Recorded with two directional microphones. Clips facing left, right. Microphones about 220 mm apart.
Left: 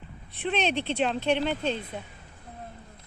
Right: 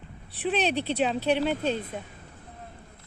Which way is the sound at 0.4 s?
5° right (ahead or behind).